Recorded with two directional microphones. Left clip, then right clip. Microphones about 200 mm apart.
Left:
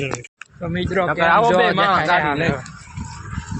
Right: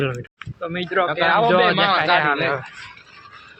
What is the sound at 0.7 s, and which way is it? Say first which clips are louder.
Speech: even; 10° left (ahead or behind).